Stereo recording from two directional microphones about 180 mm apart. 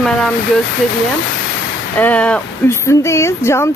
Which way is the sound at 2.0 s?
5° left (ahead or behind).